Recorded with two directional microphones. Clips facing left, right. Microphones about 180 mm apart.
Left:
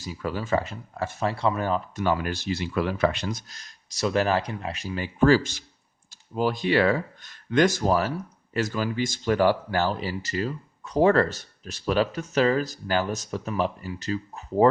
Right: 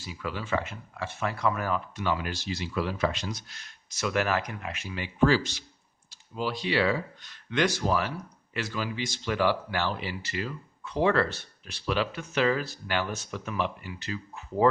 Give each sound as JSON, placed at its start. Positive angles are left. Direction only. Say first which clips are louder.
{"t": 0.0, "sound": "speech", "louder": "left 5 dB", "side_deg": 40}
{"t": 1.3, "sound": "speech", "louder": "left 2 dB", "side_deg": 30}
{"t": 2.0, "sound": "speech", "louder": "left 5 dB", "side_deg": 45}